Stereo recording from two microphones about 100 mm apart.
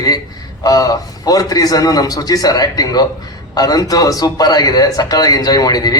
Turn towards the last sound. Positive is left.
turn(degrees=40)  # may be behind; listen again after turning